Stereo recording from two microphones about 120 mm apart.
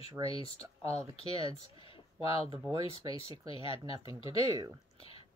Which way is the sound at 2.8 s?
50° left (ahead or behind).